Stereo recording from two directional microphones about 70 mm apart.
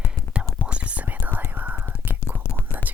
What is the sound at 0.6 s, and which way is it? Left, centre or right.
Whispering, centre.